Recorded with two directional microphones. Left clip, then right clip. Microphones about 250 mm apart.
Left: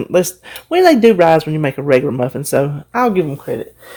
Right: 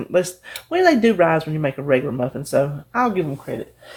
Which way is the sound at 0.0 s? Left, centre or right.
Left.